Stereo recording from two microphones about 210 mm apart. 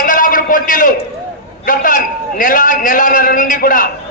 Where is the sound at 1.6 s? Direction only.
40° left (ahead or behind).